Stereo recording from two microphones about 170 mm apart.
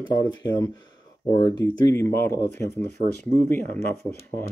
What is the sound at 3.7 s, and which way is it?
Speech, 15° left (ahead or behind).